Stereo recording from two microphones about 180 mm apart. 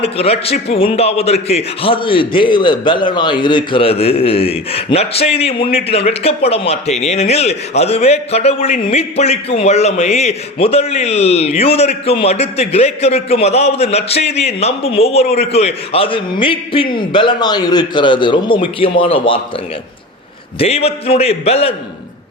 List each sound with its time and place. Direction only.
0.0 s a man's voice: 35° left (ahead or behind)
20.6 s a man's voice: 35° left (ahead or behind)